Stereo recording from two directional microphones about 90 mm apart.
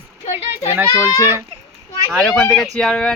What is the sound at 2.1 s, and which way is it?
Speech, 5° left (ahead or behind).